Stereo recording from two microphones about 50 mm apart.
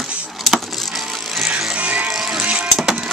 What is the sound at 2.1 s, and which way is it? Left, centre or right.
Music, centre.